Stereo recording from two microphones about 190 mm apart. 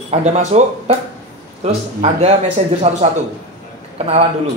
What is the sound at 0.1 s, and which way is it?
Speech, 35° right (ahead or behind).